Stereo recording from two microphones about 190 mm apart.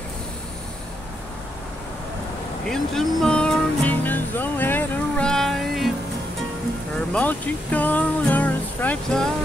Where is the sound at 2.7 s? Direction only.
Centre (ahead or behind).